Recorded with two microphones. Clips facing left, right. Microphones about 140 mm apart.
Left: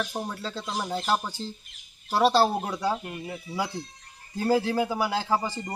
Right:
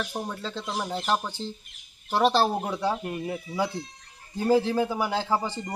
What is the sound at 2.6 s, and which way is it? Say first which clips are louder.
Speech: right 1 dB; 10° right (ahead or behind).